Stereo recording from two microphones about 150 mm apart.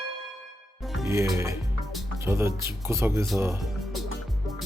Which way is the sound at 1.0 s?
20° right (ahead or behind).